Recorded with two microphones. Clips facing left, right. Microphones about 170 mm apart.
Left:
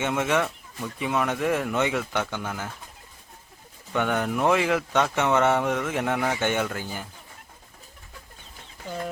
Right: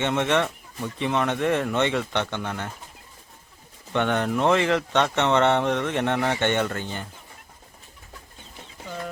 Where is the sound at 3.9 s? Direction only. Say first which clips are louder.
Right 2 dB; 5° left (ahead or behind).